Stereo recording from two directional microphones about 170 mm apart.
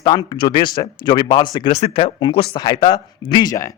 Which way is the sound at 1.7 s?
40° left (ahead or behind).